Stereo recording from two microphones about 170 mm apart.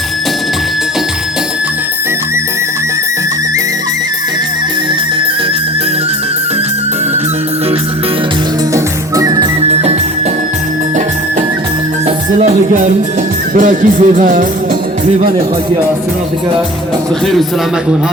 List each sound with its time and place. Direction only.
8.7 s music: 20° right (ahead or behind)
9.6 s music: 35° right (ahead or behind)
12.0 s music: 45° right (ahead or behind)
13.5 s speech: 50° right (ahead or behind)